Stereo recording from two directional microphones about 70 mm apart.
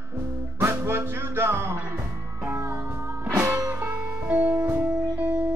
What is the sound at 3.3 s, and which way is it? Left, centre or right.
Music, right.